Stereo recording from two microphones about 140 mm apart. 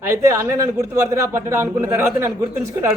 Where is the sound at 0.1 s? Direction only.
20° right (ahead or behind).